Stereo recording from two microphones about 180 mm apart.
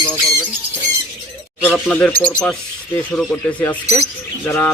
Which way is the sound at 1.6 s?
5° left (ahead or behind).